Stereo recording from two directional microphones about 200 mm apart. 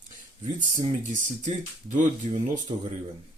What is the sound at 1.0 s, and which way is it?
Speech, 40° right (ahead or behind).